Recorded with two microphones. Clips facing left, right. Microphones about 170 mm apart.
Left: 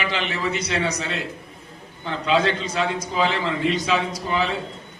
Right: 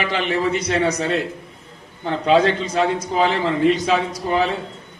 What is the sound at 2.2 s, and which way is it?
A man's voice, 45° right (ahead or behind).